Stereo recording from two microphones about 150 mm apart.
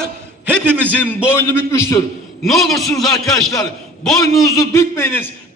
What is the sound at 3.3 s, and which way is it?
A man's voice, 20° left (ahead or behind).